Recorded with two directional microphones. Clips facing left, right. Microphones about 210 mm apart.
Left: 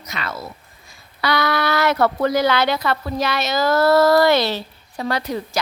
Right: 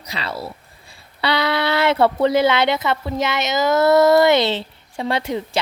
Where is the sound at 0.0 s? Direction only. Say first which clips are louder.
Right 2 dB; 30° right (ahead or behind).